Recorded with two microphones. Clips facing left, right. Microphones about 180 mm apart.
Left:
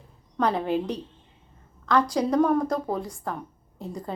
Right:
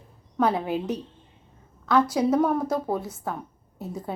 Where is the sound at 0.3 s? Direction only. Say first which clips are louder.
Even; 5° right (ahead or behind).